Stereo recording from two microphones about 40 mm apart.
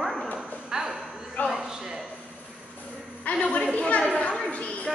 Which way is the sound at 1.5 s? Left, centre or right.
Centre.